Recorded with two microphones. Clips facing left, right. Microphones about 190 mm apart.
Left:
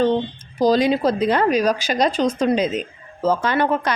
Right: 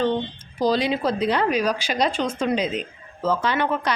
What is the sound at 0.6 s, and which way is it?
A woman's voice, 45° left (ahead or behind).